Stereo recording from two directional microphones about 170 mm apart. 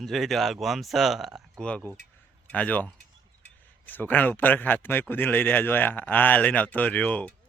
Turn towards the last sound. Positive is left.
turn(degrees=5)  # may be behind; listen again after turning